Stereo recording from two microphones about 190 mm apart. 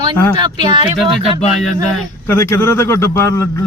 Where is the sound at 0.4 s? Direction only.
25° right (ahead or behind).